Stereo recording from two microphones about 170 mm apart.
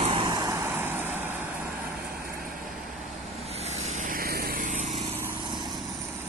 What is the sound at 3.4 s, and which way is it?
Vehicle, 40° right (ahead or behind).